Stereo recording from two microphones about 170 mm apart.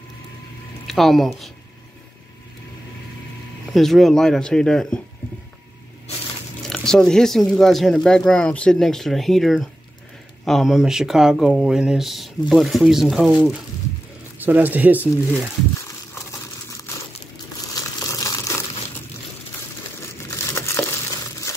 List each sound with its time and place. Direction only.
0.8 s speech: centre (ahead or behind)
3.7 s speech: centre (ahead or behind)
6.7 s speech: 5° left (ahead or behind)
17.7 s crumpling: 20° left (ahead or behind)
20.2 s crushing: 15° left (ahead or behind)